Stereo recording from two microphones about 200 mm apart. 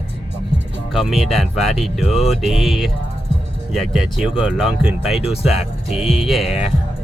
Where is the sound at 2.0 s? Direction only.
30° left (ahead or behind).